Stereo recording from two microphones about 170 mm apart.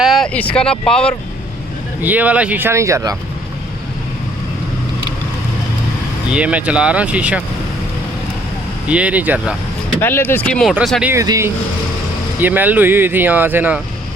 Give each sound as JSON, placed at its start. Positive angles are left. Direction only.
{"t": 0.0, "sound": "a sound", "side_deg": 0}
{"t": 0.3, "sound": "speech", "side_deg": 5}
{"t": 2.0, "sound": "speech", "side_deg": -10}
{"t": 6.3, "sound": "speech", "side_deg": -5}
{"t": 8.9, "sound": "speech", "side_deg": -5}
{"t": 10.0, "sound": "speech", "side_deg": 10}
{"t": 11.1, "sound": "speech", "side_deg": -15}